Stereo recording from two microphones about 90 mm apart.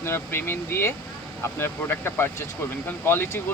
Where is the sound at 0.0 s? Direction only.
25° left (ahead or behind).